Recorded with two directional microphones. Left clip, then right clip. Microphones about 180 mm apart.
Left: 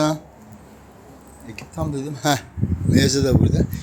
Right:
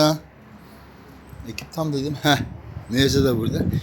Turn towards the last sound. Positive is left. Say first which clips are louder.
# left 2 dB
turn(degrees=-10)  # may be behind; listen again after turning